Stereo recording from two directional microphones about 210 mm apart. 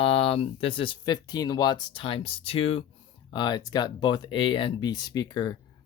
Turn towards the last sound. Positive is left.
turn(degrees=20)  # may be behind; listen again after turning